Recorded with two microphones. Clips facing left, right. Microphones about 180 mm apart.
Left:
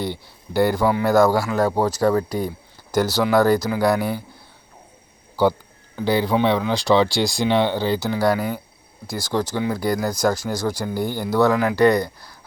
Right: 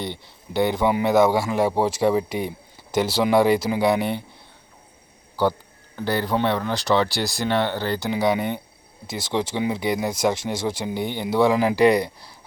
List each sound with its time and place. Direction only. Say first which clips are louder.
0.0 s speech: left 4 dB; 5° left (ahead or behind)
0.8 s speech: left 1 dB; 20° right (ahead or behind)
1.1 s speech: left 2 dB; 5° right (ahead or behind)
1.4 s speech: left 1 dB; 25° right (ahead or behind)
2.0 s speech: left 1 dB; 5° right (ahead or behind)
3.1 s speech: even; 25° right (ahead or behind)
5.4 s speech: left 3 dB; 10° left (ahead or behind)
8.3 s speech: left 1 dB; 25° right (ahead or behind)
10.9 s speech: left 2 dB; centre (ahead or behind)
11.2 s speech: even; 25° right (ahead or behind)